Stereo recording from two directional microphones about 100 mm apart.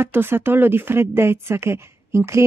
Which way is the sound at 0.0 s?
25° right (ahead or behind).